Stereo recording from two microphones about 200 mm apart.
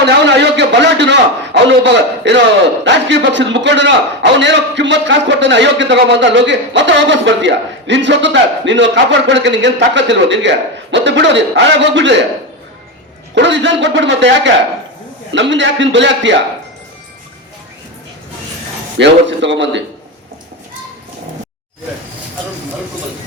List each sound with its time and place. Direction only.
0.0 s a man's voice: 60° right (ahead or behind)
13.3 s a man's voice: 60° right (ahead or behind)
18.9 s a man's voice: 65° right (ahead or behind)